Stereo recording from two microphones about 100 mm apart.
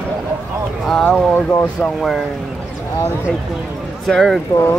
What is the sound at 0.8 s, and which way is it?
Speech, 5° left (ahead or behind).